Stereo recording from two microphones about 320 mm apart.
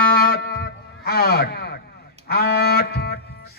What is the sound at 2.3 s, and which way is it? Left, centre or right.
Music, left.